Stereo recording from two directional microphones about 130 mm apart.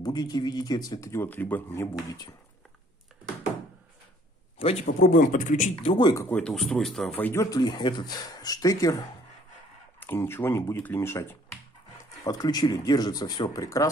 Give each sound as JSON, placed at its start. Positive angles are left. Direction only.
{"t": 0.0, "sound": "speech", "side_deg": 30}
{"t": 4.6, "sound": "a man's voice", "side_deg": 50}
{"t": 4.8, "sound": "speech", "side_deg": 85}
{"t": 5.8, "sound": "speech", "side_deg": 40}
{"t": 6.2, "sound": "speech", "side_deg": 10}
{"t": 7.2, "sound": "speech", "side_deg": 15}
{"t": 7.5, "sound": "speech", "side_deg": 35}
{"t": 9.9, "sound": "speech", "side_deg": 15}
{"t": 12.3, "sound": "speech", "side_deg": 30}